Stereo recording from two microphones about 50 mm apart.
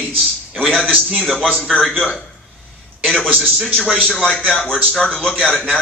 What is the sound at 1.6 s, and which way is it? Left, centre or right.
Speech, centre.